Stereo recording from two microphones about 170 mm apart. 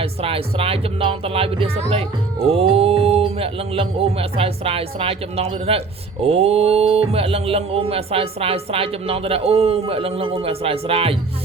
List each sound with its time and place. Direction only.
0.0 s speech: 35° right (ahead or behind)